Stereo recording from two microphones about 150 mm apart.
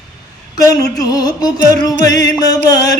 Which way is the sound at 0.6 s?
25° left (ahead or behind).